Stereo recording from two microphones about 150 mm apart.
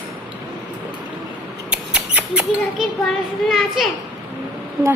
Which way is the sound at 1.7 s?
10° right (ahead or behind).